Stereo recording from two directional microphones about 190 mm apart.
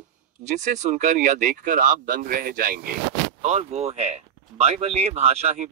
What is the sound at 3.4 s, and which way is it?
Speech, 35° right (ahead or behind).